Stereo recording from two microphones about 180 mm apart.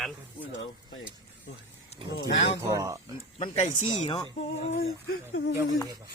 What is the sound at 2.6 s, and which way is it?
Speech, 15° right (ahead or behind).